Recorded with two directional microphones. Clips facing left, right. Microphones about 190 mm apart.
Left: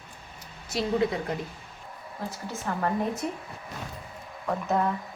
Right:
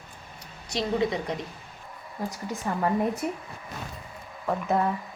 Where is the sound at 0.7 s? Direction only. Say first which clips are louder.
Even; centre (ahead or behind).